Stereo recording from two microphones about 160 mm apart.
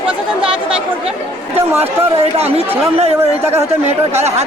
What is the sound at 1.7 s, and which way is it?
Speech, 40° right (ahead or behind).